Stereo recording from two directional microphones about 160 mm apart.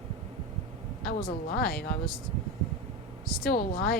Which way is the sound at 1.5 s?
75° left (ahead or behind).